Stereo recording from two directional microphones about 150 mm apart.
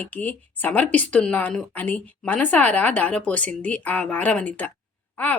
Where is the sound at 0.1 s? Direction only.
10° left (ahead or behind).